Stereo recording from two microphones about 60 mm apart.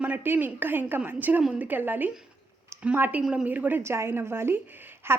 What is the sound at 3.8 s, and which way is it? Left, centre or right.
A woman's voice, right.